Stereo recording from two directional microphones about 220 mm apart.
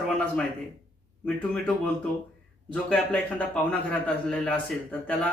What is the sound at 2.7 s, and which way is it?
A man's voice, 5° left (ahead or behind).